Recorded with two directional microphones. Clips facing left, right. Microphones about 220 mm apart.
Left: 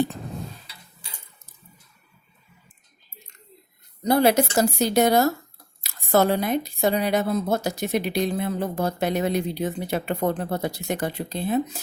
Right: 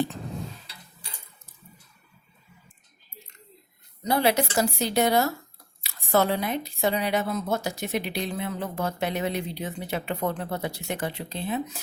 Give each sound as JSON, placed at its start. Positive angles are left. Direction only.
{"t": 4.0, "sound": "speech", "side_deg": 45}